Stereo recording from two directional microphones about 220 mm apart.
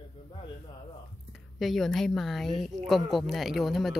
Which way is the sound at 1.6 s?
Centre (ahead or behind).